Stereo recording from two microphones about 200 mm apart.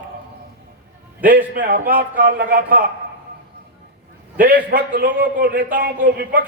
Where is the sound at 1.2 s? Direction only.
45° right (ahead or behind).